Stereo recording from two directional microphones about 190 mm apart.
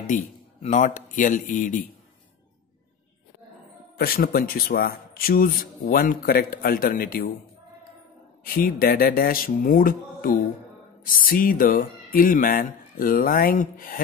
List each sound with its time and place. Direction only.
0.0 s speech: 40° left (ahead or behind)
4.0 s speech: 50° left (ahead or behind)
8.5 s speech: 50° left (ahead or behind)